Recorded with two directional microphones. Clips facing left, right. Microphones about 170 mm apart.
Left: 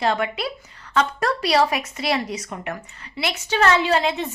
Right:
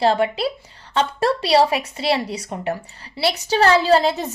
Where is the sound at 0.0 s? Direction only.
30° right (ahead or behind).